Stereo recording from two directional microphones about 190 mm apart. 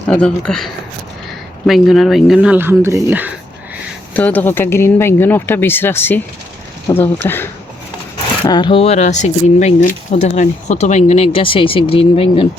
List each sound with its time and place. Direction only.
0.1 s speech: 5° left (ahead or behind)
4.1 s speech: 10° left (ahead or behind)
8.4 s speech: 25° left (ahead or behind)